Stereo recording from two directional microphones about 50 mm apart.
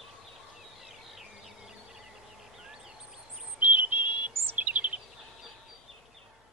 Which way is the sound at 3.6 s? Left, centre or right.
Right.